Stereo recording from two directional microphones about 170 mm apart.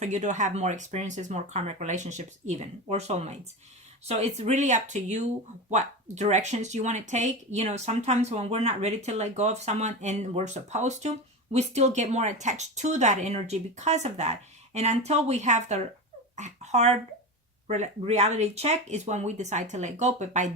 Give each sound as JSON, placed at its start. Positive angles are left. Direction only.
{"t": 0.0, "sound": "speech", "side_deg": -45}